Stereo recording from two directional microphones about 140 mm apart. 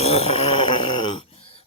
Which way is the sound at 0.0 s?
50° left (ahead or behind).